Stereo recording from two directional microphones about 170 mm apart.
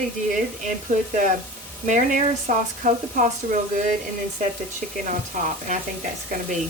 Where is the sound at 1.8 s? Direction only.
50° right (ahead or behind).